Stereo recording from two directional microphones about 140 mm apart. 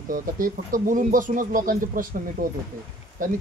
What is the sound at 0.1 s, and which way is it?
Speech, 75° right (ahead or behind).